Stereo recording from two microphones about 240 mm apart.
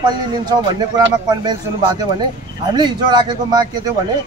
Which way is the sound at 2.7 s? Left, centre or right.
Centre.